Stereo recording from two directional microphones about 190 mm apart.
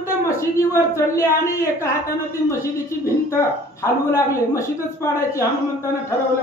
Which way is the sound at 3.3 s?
15° left (ahead or behind).